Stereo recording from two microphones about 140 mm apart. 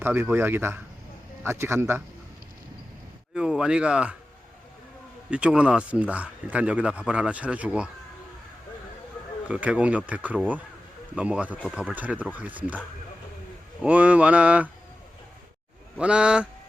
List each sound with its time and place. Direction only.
0.0 s speech: 15° right (ahead or behind)
3.3 s speech: 5° right (ahead or behind)
5.3 s speech: 10° right (ahead or behind)
9.5 s speech: 10° right (ahead or behind)
13.8 s speech: 10° right (ahead or behind)
16.0 s speech: 5° right (ahead or behind)